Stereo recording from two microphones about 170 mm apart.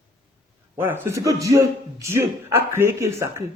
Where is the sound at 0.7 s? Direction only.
15° right (ahead or behind).